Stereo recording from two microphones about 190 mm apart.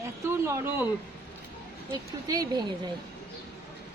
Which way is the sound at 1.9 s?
20° right (ahead or behind).